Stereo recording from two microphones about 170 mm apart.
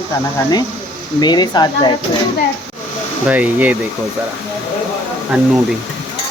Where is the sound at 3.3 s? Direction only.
10° right (ahead or behind).